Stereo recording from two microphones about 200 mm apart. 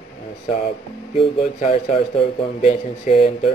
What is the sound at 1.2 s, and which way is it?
Speech, 35° left (ahead or behind).